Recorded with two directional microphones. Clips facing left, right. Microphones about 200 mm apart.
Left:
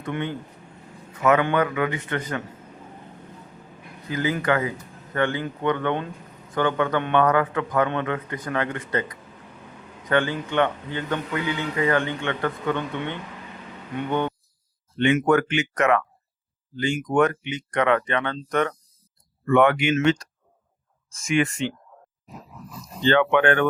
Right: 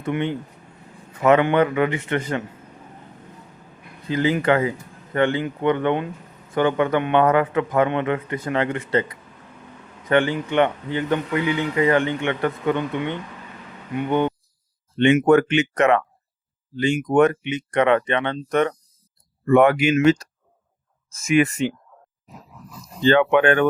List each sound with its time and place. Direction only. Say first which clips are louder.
0.0 s speech: right 4 dB; 20° right (ahead or behind)
1.2 s a man's voice: right 4 dB; 30° right (ahead or behind)
4.1 s a man's voice: right 4 dB; 25° right (ahead or behind)
21.2 s a man's voice: right 4 dB; 20° right (ahead or behind)
23.0 s speech: right 3 dB; 15° right (ahead or behind)